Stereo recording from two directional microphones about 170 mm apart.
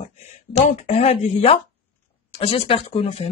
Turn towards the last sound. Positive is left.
turn(degrees=35)  # may be behind; listen again after turning